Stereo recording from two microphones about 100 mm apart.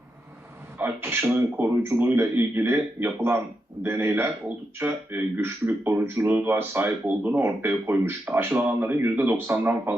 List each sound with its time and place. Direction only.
0.8 s a man's voice: 20° right (ahead or behind)